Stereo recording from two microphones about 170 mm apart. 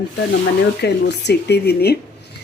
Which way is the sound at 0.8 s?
80° left.